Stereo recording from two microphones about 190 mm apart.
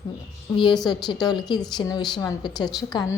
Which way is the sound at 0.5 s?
25° left (ahead or behind).